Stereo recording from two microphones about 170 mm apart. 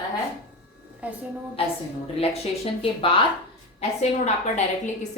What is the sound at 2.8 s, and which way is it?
Speech, 30° left (ahead or behind).